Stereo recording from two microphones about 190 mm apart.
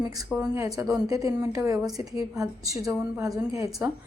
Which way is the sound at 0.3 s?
10° right (ahead or behind).